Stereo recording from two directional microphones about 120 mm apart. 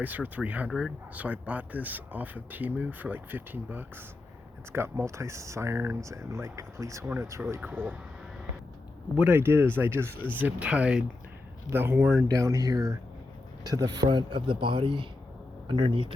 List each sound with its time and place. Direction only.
0.0 s speech: 15° right (ahead or behind)
7.7 s speech: 10° right (ahead or behind)
9.1 s speech: 15° right (ahead or behind)
12.3 s speech: 30° right (ahead or behind); by 16.1 s 45° right (ahead or behind)